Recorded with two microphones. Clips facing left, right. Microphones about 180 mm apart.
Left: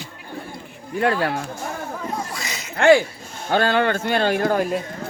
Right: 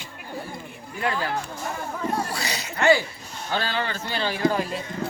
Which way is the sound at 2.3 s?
35° right (ahead or behind).